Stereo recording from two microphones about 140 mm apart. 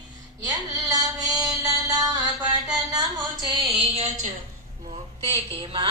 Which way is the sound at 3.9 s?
55° right (ahead or behind).